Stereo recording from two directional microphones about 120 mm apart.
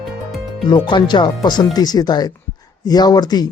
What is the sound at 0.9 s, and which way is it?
Speech, 40° left (ahead or behind).